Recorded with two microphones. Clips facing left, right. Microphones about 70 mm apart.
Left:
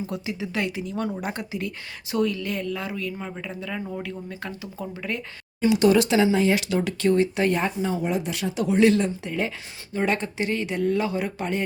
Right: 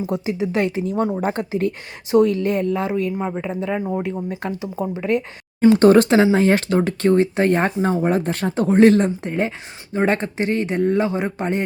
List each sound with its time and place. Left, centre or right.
0.0 s speech: right
5.5 s speech: right
7.6 s speech: right